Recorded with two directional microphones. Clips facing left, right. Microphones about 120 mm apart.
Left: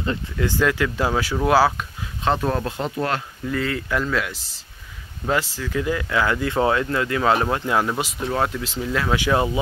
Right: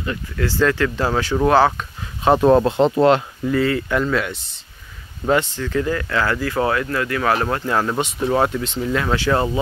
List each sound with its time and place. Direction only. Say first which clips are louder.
0.0 s speech: even; 20° left (ahead or behind); by 1.9 s 5° left (ahead or behind)
2.4 s speech: right 10 dB; 25° right (ahead or behind)
3.4 s speech: right 6 dB; centre (ahead or behind)
8.4 s speech: right 2 dB; centre (ahead or behind)
9.1 s speech: even; 15° left (ahead or behind)